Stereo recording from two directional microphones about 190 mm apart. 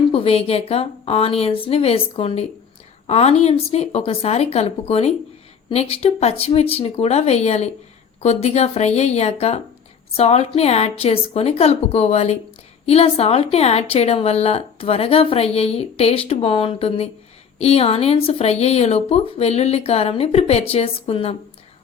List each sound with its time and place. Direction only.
0.1 s a woman's voice: 30° left (ahead or behind)